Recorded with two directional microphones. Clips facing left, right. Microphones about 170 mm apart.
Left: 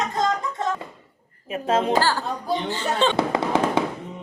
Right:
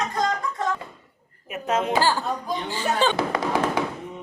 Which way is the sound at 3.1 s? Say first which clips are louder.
Left 2 dB; 25° left (ahead or behind).